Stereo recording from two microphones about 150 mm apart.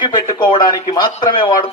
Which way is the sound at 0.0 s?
25° left (ahead or behind).